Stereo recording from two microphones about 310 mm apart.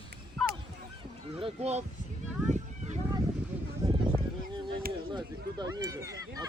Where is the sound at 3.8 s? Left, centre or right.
Centre.